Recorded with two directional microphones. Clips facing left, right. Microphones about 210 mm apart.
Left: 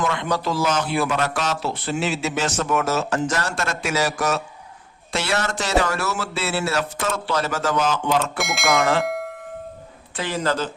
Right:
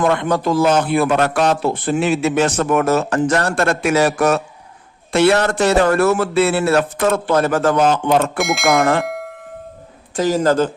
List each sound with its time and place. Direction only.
0.0 s a man's voice: 55° right (ahead or behind)
8.4 s speech: centre (ahead or behind)
8.7 s a man's voice: 55° right (ahead or behind)
9.0 s doorbell: centre (ahead or behind)
10.2 s a man's voice: 40° right (ahead or behind)